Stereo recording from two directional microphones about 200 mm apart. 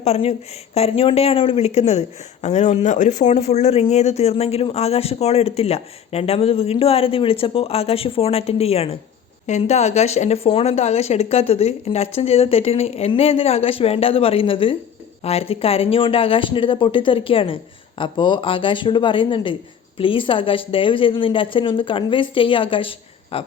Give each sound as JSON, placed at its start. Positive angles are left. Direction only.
{"t": 0.0, "sound": "a woman's voice", "side_deg": 30}